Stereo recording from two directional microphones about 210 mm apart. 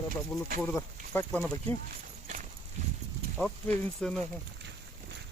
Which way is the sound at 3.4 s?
5° left (ahead or behind).